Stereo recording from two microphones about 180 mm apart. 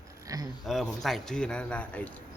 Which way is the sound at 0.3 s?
20° right (ahead or behind).